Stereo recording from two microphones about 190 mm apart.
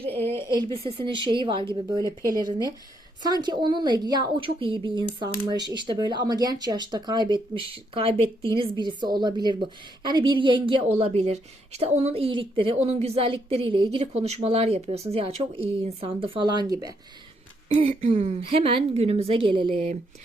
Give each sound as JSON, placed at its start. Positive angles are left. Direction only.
{"t": 0.0, "sound": "a sound", "side_deg": -30}
{"t": 0.3, "sound": "a woman's voice", "side_deg": -25}
{"t": 17.7, "sound": "speech", "side_deg": -35}